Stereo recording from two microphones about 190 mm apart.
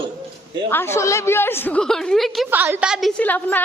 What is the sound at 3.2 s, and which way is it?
Speech, 10° left (ahead or behind).